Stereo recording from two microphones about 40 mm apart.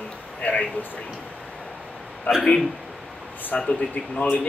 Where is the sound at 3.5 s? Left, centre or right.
Left.